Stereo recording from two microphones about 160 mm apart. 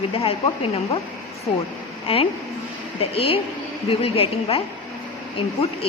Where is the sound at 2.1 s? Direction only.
35° left (ahead or behind).